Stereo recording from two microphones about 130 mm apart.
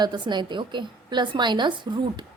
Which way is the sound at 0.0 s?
35° right (ahead or behind).